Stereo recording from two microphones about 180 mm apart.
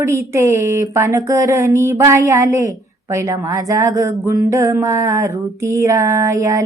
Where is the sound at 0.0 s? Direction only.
15° right (ahead or behind).